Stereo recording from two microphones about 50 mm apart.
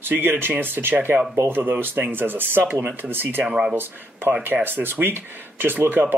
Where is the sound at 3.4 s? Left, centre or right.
Centre.